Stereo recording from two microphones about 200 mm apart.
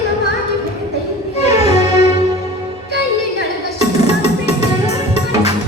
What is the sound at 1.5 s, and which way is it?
Music, 35° left (ahead or behind).